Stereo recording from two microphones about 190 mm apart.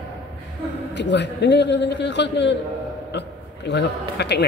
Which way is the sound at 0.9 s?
65° left (ahead or behind).